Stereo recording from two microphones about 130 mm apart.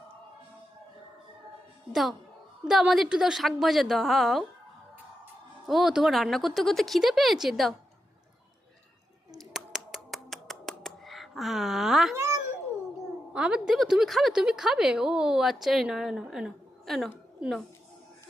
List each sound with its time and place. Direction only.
1.9 s a woman's voice: centre (ahead or behind)
5.6 s a woman's voice: centre (ahead or behind)
9.4 s finger snapping: 5° right (ahead or behind)
12.1 s babbling: 20° right (ahead or behind)
13.3 s a woman's voice: 5° right (ahead or behind)